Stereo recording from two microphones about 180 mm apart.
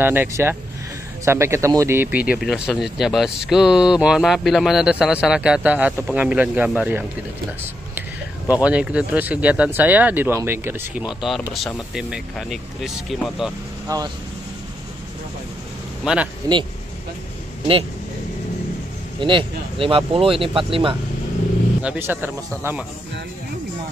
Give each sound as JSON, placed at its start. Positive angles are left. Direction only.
{"t": 0.0, "sound": "speech", "side_deg": -10}
{"t": 8.6, "sound": "speech", "side_deg": -5}
{"t": 13.8, "sound": "speech", "side_deg": -20}
{"t": 16.0, "sound": "a man's voice", "side_deg": -5}
{"t": 19.1, "sound": "speech", "side_deg": -25}
{"t": 21.8, "sound": "speech", "side_deg": -10}